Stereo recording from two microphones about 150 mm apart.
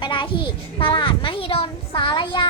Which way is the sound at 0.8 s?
35° left (ahead or behind).